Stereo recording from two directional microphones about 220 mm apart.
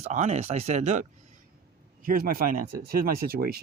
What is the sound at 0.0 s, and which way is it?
Speech, 30° right (ahead or behind).